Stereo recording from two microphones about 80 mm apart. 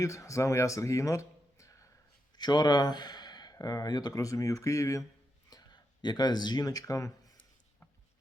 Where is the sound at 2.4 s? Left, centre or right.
Left.